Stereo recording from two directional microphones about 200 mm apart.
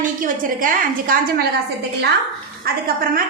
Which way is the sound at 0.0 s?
40° right (ahead or behind).